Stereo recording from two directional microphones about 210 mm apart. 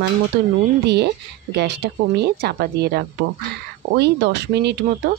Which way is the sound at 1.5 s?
55° right (ahead or behind).